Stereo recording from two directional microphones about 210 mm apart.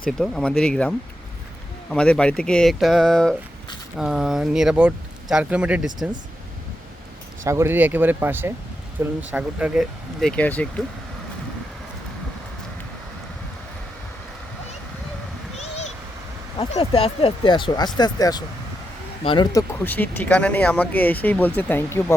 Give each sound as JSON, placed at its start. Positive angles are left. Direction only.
{"t": 0.2, "sound": "speech", "side_deg": 5}
{"t": 7.4, "sound": "speech", "side_deg": -15}
{"t": 16.6, "sound": "speech", "side_deg": 25}
{"t": 19.8, "sound": "speech", "side_deg": 10}